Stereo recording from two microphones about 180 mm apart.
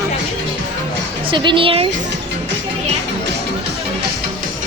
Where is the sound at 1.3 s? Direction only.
25° right (ahead or behind).